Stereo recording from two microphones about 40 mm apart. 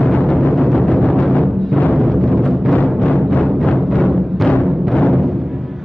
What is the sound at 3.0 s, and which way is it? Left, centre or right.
Timpani, left.